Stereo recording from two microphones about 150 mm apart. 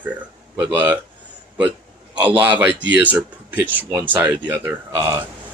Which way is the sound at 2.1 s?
10° right (ahead or behind).